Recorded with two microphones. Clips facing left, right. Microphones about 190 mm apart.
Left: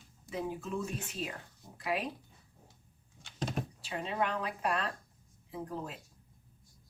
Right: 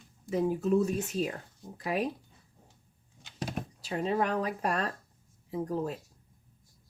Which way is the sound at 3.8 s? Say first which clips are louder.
Right 6 dB; 40° right (ahead or behind).